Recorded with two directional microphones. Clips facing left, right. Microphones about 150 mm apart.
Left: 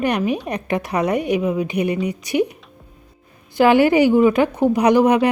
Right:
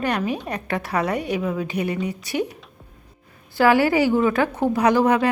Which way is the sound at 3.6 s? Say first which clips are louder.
Left 4 dB; 20° left (ahead or behind).